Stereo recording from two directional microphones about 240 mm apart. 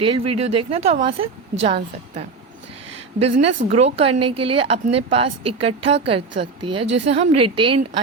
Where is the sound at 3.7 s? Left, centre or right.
Right.